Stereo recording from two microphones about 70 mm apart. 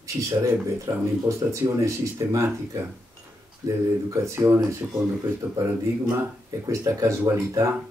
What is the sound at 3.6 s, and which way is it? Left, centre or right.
Speech, right.